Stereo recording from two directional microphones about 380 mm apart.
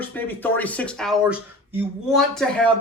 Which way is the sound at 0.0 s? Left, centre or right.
Centre.